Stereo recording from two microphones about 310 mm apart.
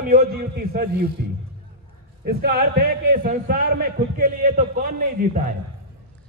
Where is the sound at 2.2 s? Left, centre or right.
Right.